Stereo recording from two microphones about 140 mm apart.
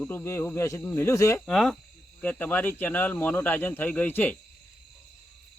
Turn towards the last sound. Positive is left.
turn(degrees=10)  # may be behind; listen again after turning